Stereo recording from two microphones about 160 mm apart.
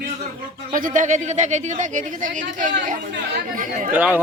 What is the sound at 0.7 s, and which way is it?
Speech, 55° right (ahead or behind).